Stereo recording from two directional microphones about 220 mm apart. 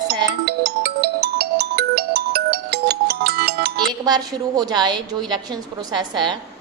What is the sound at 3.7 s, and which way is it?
A woman's voice, 20° right (ahead or behind).